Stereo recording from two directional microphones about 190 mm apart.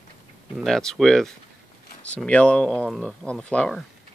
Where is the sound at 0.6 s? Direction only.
Centre (ahead or behind).